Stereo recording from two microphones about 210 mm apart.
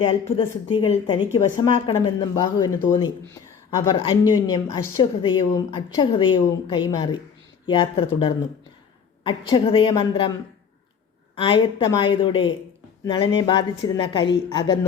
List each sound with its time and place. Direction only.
0.1 s a woman's voice: 25° left (ahead or behind)
11.4 s a woman's voice: 20° left (ahead or behind)